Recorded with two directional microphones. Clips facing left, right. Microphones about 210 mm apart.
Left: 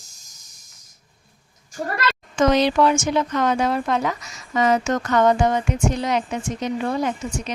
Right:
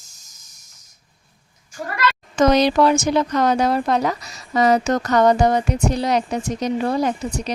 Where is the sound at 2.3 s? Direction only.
40° right (ahead or behind).